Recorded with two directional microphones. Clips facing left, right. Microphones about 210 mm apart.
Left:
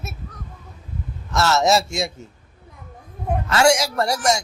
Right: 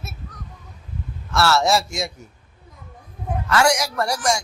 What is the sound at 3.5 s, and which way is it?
Speech, 25° left (ahead or behind).